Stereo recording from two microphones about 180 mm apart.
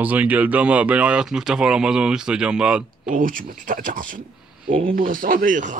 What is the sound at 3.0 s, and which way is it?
A man's voice, 50° right (ahead or behind).